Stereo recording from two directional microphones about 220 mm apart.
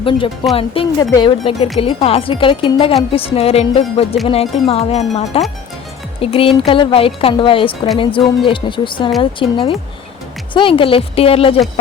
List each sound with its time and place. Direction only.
0.0 s a woman's voice: 25° left (ahead or behind)